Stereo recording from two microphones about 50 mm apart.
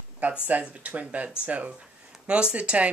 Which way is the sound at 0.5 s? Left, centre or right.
Right.